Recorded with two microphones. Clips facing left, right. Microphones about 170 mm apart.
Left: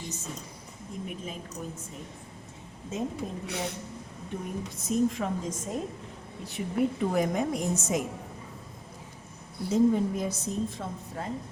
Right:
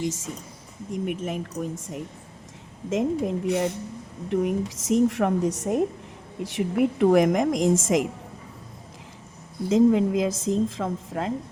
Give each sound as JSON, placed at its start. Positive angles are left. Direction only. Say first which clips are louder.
{"t": 0.0, "sound": "a woman's voice", "louder": "right 11 dB", "side_deg": -90}
{"t": 1.0, "sound": "a woman's voice", "louder": "right 10 dB", "side_deg": -75}
{"t": 6.4, "sound": "a woman's voice", "louder": "right 5 dB", "side_deg": -85}
{"t": 9.6, "sound": "a woman's voice", "louder": "right 5 dB", "side_deg": -90}